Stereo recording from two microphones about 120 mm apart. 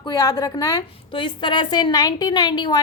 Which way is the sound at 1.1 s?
45° left (ahead or behind).